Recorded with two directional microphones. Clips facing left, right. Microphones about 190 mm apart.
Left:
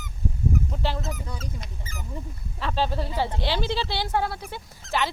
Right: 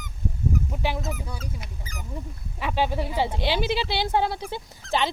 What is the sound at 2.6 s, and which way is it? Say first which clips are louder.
Speech: right 1 dB; 15° right (ahead or behind).